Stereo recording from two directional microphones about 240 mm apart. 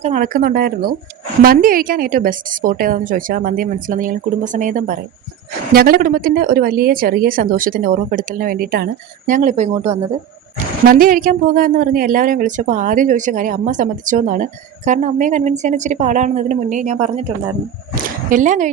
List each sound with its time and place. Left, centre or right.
0.0 s speech: right
18.3 s speech: right